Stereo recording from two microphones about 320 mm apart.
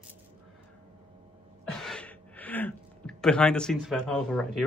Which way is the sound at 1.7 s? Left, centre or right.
Centre.